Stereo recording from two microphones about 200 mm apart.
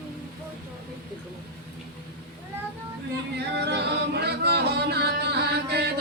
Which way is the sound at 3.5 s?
55° right (ahead or behind).